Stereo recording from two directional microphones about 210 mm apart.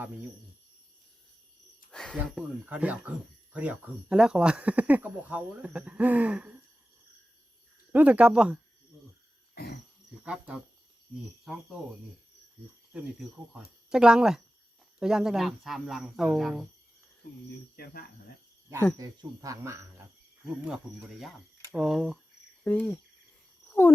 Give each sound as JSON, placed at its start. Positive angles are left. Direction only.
{"t": 1.9, "sound": "a sound", "side_deg": 5}
{"t": 2.1, "sound": "speech", "side_deg": -5}
{"t": 7.9, "sound": "speech", "side_deg": -5}
{"t": 10.2, "sound": "speech", "side_deg": -5}
{"t": 12.9, "sound": "speech", "side_deg": -5}
{"t": 18.9, "sound": "speech", "side_deg": -15}
{"t": 20.7, "sound": "speech", "side_deg": -5}
{"t": 22.6, "sound": "cricket", "side_deg": 5}